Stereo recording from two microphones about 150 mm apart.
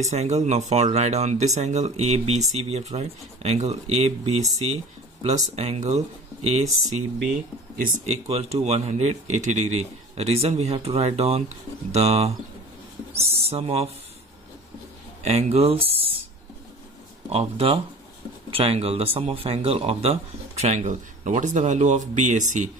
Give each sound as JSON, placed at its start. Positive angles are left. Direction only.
{"t": 0.0, "sound": "speech", "side_deg": -45}
{"t": 7.8, "sound": "speech", "side_deg": -45}
{"t": 15.2, "sound": "speech", "side_deg": -45}
{"t": 17.3, "sound": "speech", "side_deg": -40}